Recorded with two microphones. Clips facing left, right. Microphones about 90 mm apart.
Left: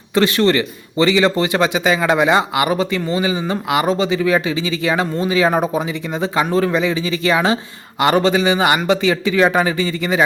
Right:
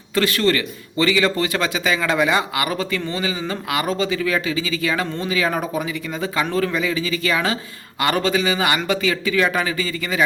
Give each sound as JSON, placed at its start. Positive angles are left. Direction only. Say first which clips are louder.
{"t": 0.1, "sound": "a man's voice", "louder": "left 4 dB", "side_deg": 20}